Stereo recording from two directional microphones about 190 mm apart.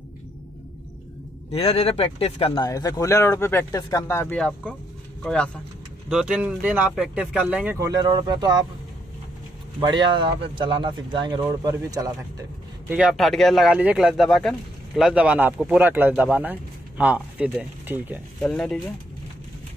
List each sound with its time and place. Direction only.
1.5 s speech: 30° left (ahead or behind); by 7.7 s 5° right (ahead or behind)
7.8 s speech: 20° right (ahead or behind)
9.8 s speech: 25° right (ahead or behind)
12.8 s speech: 5° right (ahead or behind)
18.4 s speech: 5° left (ahead or behind)